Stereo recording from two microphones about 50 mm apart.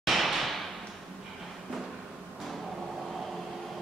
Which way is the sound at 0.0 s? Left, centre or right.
Centre.